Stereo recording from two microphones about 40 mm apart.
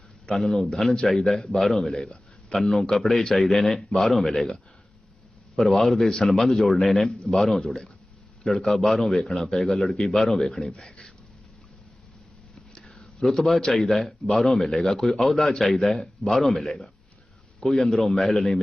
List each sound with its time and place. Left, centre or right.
0.3 s a man's voice: centre
1.9 s a sound: centre
2.6 s a man's voice: centre
5.7 s a man's voice: centre
7.1 s speech: centre
7.3 s a man's voice: centre
12.7 s a sound: centre
13.1 s a man's voice: centre